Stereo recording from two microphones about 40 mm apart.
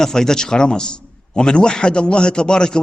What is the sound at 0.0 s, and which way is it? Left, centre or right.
A man's voice, centre.